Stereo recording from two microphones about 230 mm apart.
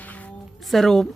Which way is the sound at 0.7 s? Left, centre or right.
Centre.